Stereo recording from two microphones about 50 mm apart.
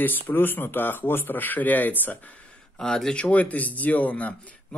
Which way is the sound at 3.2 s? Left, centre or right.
Left.